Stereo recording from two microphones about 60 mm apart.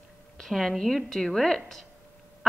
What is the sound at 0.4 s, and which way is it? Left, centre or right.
A woman's voice, centre.